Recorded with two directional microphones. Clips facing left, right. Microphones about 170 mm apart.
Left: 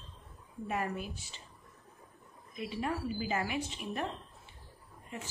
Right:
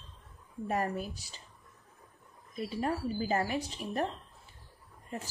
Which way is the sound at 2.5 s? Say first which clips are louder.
Right 3 dB; 40° right (ahead or behind).